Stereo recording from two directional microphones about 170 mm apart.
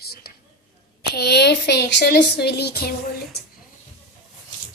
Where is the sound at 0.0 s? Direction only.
65° left (ahead or behind).